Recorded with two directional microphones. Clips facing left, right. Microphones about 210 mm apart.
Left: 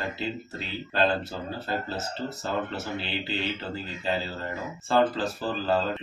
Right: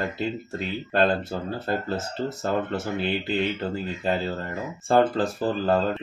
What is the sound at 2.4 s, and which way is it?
Speech, 50° right (ahead or behind).